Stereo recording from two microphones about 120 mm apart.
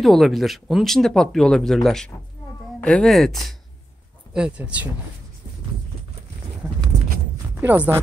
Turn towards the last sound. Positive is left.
turn(degrees=-15)  # may be behind; listen again after turning